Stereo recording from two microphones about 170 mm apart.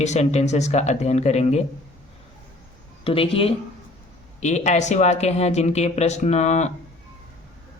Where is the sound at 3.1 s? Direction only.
35° left (ahead or behind).